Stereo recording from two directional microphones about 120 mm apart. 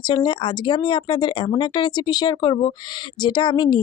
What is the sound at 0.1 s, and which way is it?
Speech, 40° left (ahead or behind).